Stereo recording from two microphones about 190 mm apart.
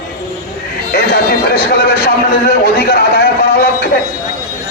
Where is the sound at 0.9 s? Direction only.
55° left (ahead or behind).